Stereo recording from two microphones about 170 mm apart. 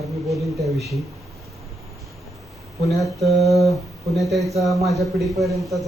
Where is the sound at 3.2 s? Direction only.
Centre (ahead or behind).